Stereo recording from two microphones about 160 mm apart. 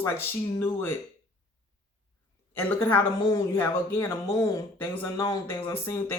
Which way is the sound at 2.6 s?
10° left (ahead or behind).